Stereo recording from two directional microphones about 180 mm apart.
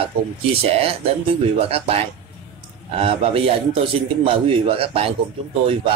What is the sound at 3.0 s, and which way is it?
Speech, 35° right (ahead or behind).